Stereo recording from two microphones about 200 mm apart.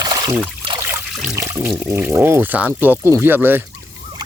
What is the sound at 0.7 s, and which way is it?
Trickle, 15° right (ahead or behind).